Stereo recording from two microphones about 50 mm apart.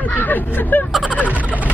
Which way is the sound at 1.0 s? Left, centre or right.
Left.